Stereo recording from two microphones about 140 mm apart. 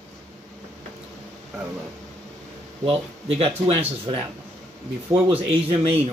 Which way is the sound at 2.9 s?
45° right (ahead or behind).